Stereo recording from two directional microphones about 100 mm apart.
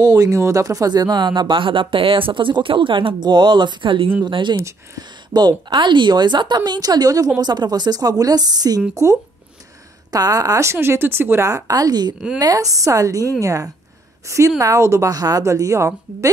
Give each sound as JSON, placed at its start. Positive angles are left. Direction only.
{"t": 0.1, "sound": "speech", "side_deg": -35}
{"t": 4.6, "sound": "speech", "side_deg": -40}